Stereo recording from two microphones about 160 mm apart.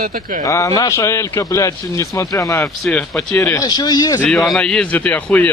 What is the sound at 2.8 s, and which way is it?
Speech, 5° left (ahead or behind).